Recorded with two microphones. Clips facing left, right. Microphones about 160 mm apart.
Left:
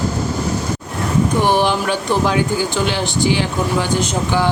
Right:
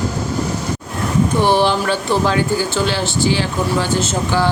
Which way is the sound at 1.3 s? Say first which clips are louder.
Right 2 dB; 15° left (ahead or behind).